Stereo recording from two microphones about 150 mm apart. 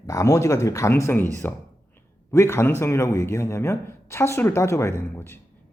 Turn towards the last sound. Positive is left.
turn(degrees=20)  # may be behind; listen again after turning